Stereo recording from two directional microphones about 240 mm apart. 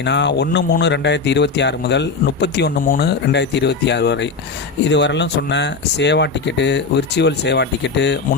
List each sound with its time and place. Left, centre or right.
0.0 s speech: left